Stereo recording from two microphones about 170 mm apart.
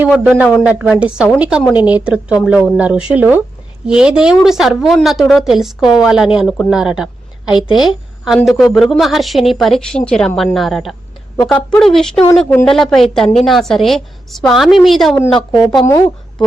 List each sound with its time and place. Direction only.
0.0 s a man's voice: 10° right (ahead or behind)
15.1 s speech: 10° left (ahead or behind)